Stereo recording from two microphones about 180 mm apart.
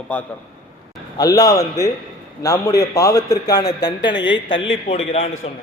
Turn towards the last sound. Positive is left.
turn(degrees=35)  # may be behind; listen again after turning